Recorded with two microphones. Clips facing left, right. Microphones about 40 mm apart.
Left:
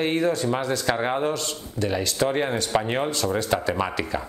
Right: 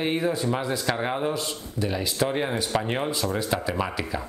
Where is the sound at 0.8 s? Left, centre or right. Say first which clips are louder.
Left 4 dB; centre.